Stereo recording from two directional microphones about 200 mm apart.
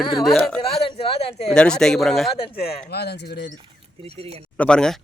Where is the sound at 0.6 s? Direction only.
30° left (ahead or behind).